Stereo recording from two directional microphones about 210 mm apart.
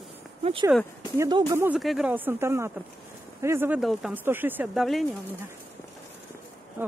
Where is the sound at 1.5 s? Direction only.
5° right (ahead or behind).